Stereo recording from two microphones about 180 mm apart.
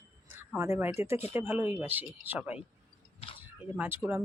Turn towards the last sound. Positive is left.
turn(degrees=-15)  # may be behind; listen again after turning